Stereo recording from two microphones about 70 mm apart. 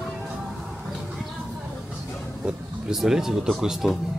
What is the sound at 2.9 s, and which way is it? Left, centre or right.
Speech, centre.